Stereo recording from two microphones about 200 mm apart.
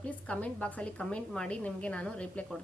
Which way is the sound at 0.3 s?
5° left (ahead or behind).